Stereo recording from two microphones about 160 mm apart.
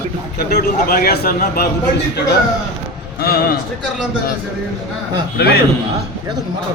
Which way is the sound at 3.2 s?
75° left (ahead or behind).